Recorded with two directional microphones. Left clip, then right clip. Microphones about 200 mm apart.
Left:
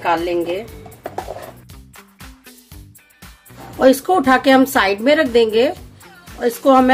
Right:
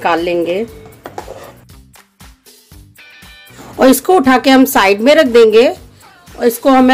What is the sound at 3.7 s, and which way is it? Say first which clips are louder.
A woman's voice: right 4 dB; 35° right (ahead or behind).